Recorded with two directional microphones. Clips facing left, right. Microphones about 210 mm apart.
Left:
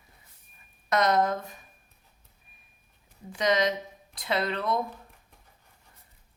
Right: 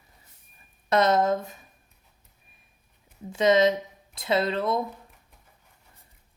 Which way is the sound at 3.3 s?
25° right (ahead or behind).